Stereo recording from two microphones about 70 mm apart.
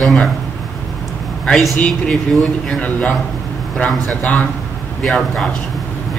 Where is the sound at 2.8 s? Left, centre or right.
Left.